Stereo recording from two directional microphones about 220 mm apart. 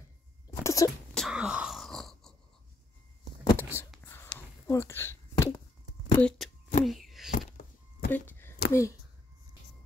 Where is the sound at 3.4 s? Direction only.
15° left (ahead or behind); by 7.3 s centre (ahead or behind).